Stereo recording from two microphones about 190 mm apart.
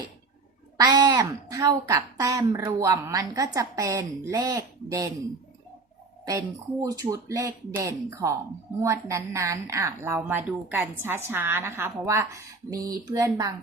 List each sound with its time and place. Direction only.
0.8 s a woman's voice: 20° right (ahead or behind)
6.8 s a woman's voice: 20° right (ahead or behind)